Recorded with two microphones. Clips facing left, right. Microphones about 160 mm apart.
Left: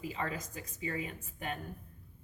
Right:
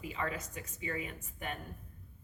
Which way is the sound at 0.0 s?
35° left (ahead or behind).